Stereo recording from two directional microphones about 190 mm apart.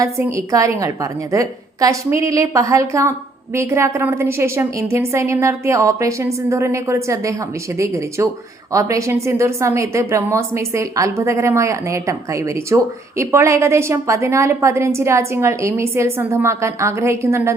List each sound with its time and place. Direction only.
0.0 s a woman's voice: 15° right (ahead or behind)